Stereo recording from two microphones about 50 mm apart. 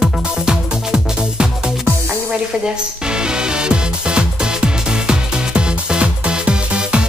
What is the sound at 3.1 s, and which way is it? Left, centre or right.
Music, centre.